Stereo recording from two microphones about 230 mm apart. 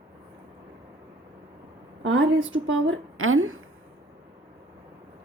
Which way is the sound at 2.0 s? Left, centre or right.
Right.